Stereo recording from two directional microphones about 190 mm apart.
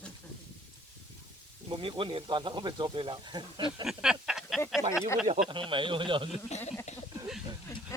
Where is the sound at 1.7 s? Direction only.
25° right (ahead or behind).